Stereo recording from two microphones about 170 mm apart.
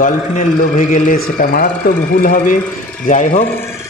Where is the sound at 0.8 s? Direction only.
50° left (ahead or behind).